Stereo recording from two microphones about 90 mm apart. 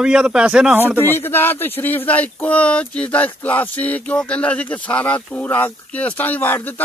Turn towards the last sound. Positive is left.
turn(degrees=20)  # may be behind; listen again after turning